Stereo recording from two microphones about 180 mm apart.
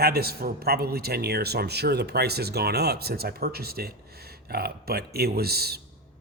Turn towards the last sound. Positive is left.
turn(degrees=-60)  # may be behind; listen again after turning